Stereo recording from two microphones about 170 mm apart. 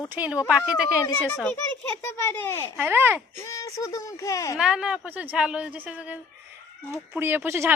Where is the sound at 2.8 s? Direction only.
10° right (ahead or behind).